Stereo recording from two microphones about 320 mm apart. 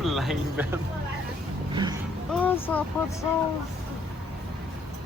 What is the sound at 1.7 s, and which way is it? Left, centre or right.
Vehicle, centre.